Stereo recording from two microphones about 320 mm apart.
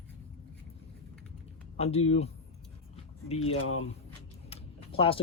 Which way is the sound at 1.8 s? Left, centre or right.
Centre.